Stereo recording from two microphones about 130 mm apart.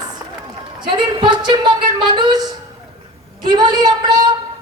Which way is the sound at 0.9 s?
35° right (ahead or behind).